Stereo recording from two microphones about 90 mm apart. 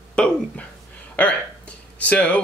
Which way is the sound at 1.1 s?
15° left (ahead or behind).